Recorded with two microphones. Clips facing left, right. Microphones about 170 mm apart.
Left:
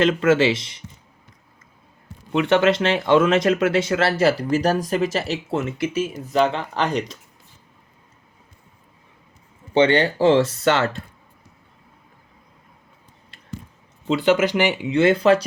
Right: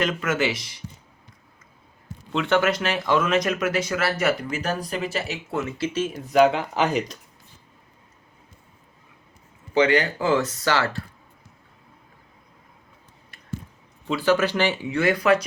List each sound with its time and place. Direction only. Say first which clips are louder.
0.0 s speech: left 7 dB; 30° left (ahead or behind)
2.3 s speech: left 4 dB; 25° left (ahead or behind)
6.3 s speech: right 2 dB; 5° right (ahead or behind)
9.7 s speech: left 3 dB; 30° left (ahead or behind)
14.1 s speech: left 3 dB; 20° left (ahead or behind)